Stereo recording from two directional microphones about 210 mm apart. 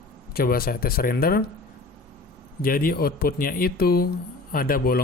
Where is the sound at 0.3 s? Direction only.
45° left (ahead or behind).